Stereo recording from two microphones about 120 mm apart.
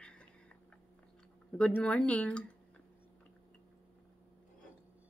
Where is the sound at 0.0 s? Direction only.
10° left (ahead or behind).